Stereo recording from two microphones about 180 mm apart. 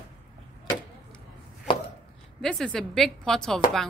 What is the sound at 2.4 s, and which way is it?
A woman's voice, 5° left (ahead or behind).